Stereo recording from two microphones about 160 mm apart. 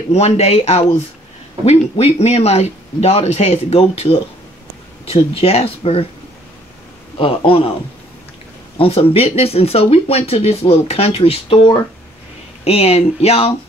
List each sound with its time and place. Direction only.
0.1 s speech: 40° left (ahead or behind)
7.2 s speech: 35° left (ahead or behind)
8.7 s speech: 35° left (ahead or behind)